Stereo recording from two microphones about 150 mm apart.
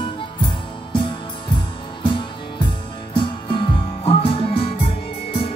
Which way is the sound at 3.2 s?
35° left (ahead or behind).